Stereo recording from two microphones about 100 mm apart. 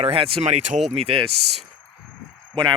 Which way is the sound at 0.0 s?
70° right (ahead or behind).